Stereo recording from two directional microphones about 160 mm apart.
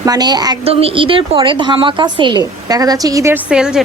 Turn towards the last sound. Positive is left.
turn(degrees=-5)  # may be behind; listen again after turning